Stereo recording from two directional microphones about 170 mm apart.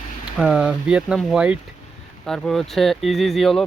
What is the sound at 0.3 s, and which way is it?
Speech, 5° right (ahead or behind).